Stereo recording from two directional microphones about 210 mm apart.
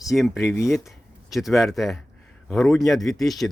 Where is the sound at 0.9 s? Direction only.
Centre (ahead or behind).